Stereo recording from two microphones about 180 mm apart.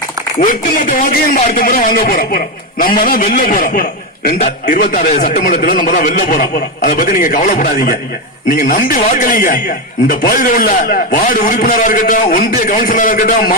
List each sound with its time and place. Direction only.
0.3 s a man's voice: 45° left (ahead or behind)
5.4 s a man's voice: 55° left (ahead or behind)